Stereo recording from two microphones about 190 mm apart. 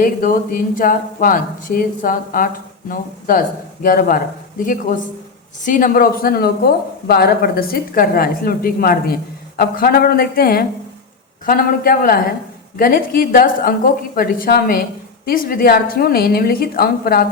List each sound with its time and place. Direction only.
0.0 s speech: 45° left (ahead or behind)